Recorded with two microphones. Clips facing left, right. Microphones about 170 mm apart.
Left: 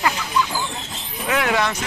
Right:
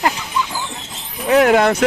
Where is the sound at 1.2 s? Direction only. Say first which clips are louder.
Right 9 dB; 45° right (ahead or behind).